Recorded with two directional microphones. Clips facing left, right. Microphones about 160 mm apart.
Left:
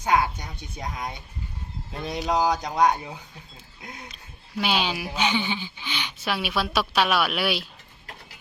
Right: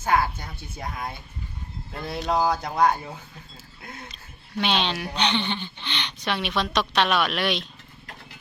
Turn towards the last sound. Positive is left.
turn(degrees=5)  # may be behind; listen again after turning